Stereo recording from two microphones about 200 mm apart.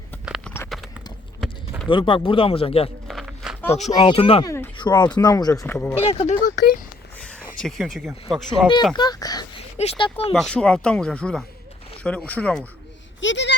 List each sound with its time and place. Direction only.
0.3 s clip-clop: centre (ahead or behind)
0.7 s a sound: centre (ahead or behind)
1.9 s speech: 25° left (ahead or behind)
3.1 s walk: centre (ahead or behind)
3.7 s speech: 35° left (ahead or behind)
4.4 s a sound: 10° left (ahead or behind)
4.8 s speech: 20° left (ahead or behind)
6.0 s speech: 30° left (ahead or behind)
7.2 s a sound: 5° left (ahead or behind)
7.6 s speech: centre (ahead or behind)
9.0 s a sound: 20° left (ahead or behind)
9.7 s speech: 30° left (ahead or behind)
10.3 s speech: 5° left (ahead or behind)
13.1 s speech: 65° left (ahead or behind)